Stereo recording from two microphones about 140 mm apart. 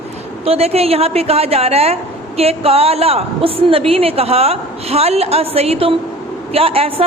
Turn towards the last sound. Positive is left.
turn(degrees=-45)  # may be behind; listen again after turning